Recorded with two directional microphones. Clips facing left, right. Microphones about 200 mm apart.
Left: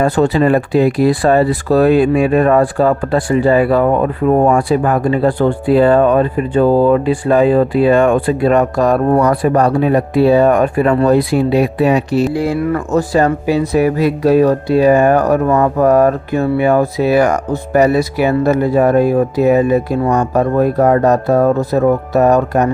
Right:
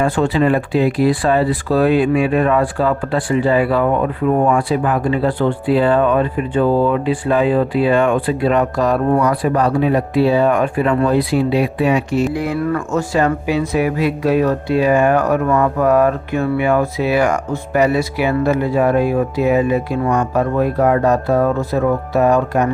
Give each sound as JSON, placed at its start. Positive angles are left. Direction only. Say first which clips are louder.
{"t": 0.0, "sound": "speech", "louder": "left 3 dB", "side_deg": 40}